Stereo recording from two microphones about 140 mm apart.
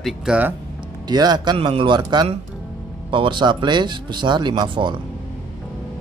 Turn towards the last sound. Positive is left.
turn(degrees=-35)  # may be behind; listen again after turning